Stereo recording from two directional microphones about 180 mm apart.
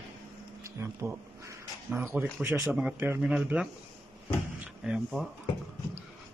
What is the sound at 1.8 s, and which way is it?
Speech, 10° right (ahead or behind).